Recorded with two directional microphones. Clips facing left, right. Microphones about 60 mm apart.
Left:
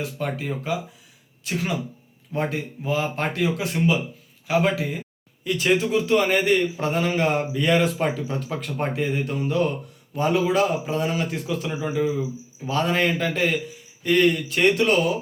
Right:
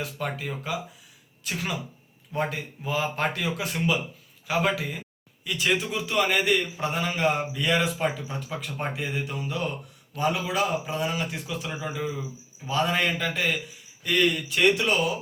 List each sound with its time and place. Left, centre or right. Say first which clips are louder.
0.2 s a man's voice: left 4 dB; left
5.5 s a man's voice: left 5 dB; left